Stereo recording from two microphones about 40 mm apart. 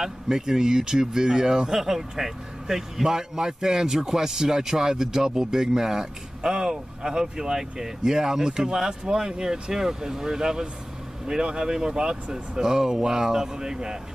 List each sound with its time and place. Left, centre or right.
0.0 s speech: centre